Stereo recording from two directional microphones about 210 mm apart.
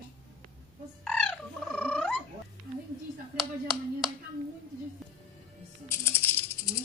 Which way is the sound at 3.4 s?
Centre (ahead or behind).